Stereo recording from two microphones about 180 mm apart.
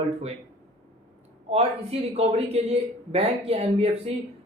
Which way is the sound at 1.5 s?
35° right (ahead or behind).